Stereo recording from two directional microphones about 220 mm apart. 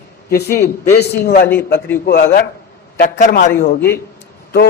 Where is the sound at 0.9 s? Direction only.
45° left (ahead or behind).